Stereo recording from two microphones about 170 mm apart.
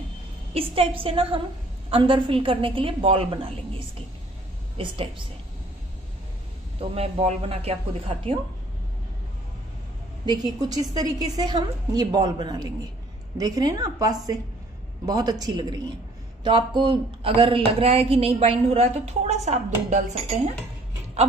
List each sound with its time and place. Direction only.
0.6 s speech: 35° right (ahead or behind)
4.7 s speech: 30° right (ahead or behind)
6.8 s speech: 35° right (ahead or behind)
10.2 s a woman's voice: 25° right (ahead or behind); by 20.1 s 45° right (ahead or behind)